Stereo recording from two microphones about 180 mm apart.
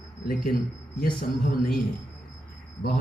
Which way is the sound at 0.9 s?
55° left (ahead or behind).